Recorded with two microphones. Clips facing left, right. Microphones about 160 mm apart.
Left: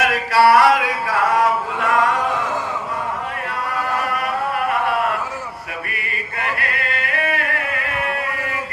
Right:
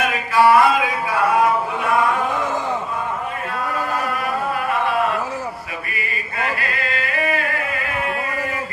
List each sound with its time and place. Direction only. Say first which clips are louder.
0.0 s a sound: left 1 dB; 80° left
5.9 s male singing: right 1 dB; 60° left (ahead or behind)
6.6 s music: even; 60° left (ahead or behind)